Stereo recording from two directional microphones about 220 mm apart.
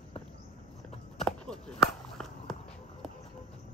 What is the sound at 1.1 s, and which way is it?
Walk, 5° left (ahead or behind).